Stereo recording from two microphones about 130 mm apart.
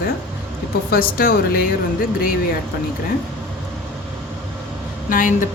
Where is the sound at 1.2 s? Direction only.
90° left.